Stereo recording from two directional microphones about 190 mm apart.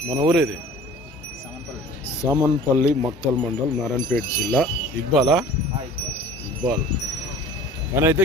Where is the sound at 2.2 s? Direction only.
20° right (ahead or behind).